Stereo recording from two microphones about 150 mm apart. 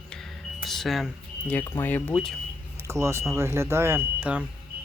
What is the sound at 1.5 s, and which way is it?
Speech, 15° left (ahead or behind).